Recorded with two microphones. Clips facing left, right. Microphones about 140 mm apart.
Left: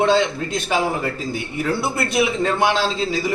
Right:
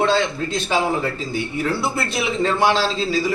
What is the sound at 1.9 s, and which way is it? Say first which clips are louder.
A man's voice: left 3 dB; 15° left (ahead or behind).